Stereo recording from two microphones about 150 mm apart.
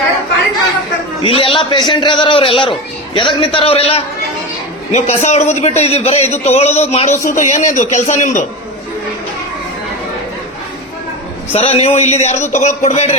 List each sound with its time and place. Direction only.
1.2 s a man's voice: 40° left (ahead or behind); by 8.4 s 55° left (ahead or behind)
11.5 s a man's voice: 45° left (ahead or behind)